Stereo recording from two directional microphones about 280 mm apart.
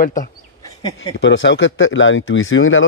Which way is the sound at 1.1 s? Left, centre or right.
Left.